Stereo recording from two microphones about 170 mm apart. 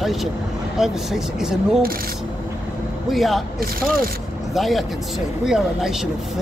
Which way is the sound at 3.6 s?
60° right (ahead or behind).